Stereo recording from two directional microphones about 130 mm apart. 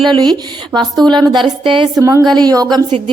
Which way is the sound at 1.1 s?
30° right (ahead or behind).